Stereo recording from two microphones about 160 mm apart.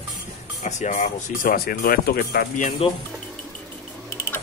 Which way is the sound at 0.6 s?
45° left (ahead or behind).